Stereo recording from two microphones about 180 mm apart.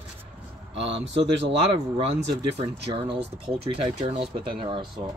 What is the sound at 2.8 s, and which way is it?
Speech, 30° right (ahead or behind).